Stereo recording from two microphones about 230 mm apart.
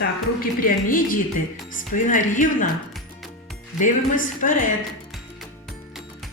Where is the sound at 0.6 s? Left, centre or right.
Left.